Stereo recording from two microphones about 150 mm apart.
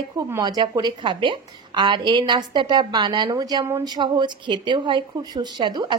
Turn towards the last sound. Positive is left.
turn(degrees=-30)  # may be behind; listen again after turning